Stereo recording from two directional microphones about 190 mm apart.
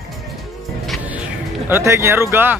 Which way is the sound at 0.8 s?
5° right (ahead or behind).